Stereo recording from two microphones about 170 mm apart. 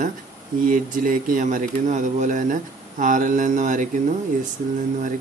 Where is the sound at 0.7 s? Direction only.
50° right (ahead or behind).